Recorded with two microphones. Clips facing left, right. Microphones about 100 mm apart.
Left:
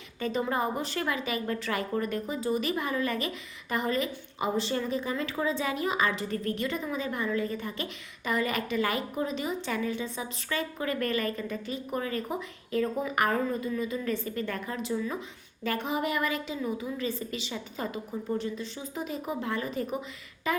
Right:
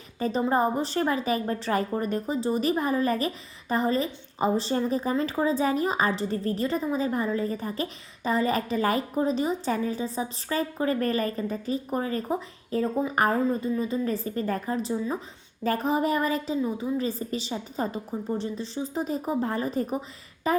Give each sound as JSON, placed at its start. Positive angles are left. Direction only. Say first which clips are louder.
{"t": 0.2, "sound": "a woman's voice", "louder": "right 5 dB", "side_deg": -35}